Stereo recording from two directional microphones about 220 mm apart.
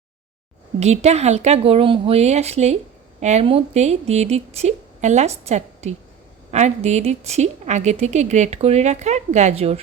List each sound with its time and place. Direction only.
0.8 s a woman's voice: 30° right (ahead or behind)